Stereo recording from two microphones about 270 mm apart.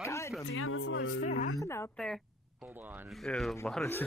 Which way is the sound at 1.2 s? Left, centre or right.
Left.